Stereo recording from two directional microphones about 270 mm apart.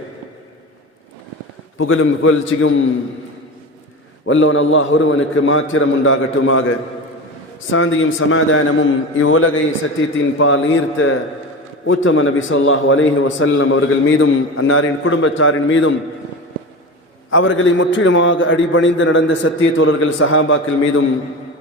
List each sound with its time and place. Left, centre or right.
1.8 s a man's voice: left
4.3 s a man's voice: left
17.3 s a man's voice: left